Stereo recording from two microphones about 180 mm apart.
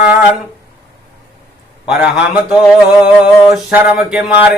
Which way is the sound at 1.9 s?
5° right (ahead or behind).